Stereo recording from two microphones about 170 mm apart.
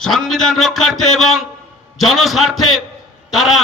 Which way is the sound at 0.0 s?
Centre (ahead or behind).